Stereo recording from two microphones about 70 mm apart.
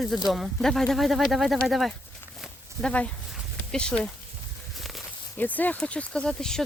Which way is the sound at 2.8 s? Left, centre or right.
Centre.